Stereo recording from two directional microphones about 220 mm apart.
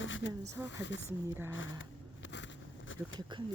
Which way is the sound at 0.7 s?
55° left (ahead or behind).